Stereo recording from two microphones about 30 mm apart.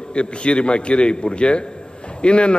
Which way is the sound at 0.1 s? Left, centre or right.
Left.